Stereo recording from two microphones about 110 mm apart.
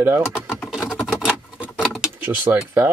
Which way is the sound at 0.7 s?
Centre (ahead or behind).